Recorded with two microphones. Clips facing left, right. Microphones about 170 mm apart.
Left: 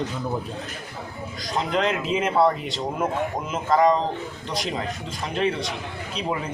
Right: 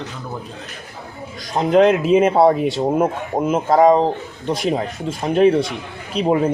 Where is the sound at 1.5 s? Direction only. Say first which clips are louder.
Right 10 dB; 45° right (ahead or behind).